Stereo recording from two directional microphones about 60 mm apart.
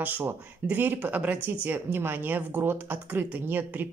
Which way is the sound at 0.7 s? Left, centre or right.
Right.